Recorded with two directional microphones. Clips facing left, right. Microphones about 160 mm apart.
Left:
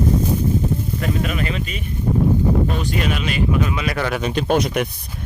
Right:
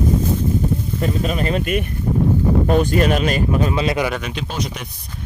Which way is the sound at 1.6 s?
60° right (ahead or behind).